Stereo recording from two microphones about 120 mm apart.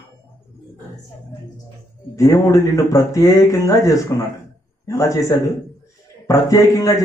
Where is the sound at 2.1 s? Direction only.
25° left (ahead or behind).